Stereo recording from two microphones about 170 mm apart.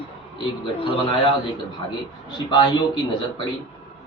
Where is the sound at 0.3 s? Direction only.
30° left (ahead or behind).